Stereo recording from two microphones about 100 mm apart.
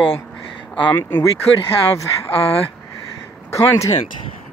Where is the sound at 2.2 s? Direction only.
70° left (ahead or behind).